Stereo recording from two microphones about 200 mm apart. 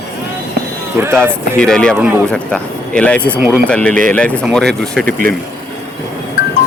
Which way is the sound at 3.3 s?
5° right (ahead or behind).